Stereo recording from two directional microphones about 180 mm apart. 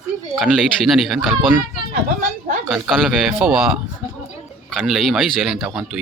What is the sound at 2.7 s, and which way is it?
Speech, centre (ahead or behind).